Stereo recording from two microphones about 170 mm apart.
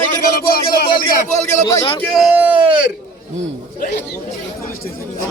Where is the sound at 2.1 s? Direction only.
5° right (ahead or behind).